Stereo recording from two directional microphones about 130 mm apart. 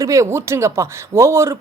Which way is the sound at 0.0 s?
25° right (ahead or behind).